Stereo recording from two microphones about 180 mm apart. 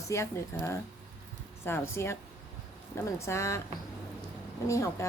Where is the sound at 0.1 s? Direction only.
15° left (ahead or behind).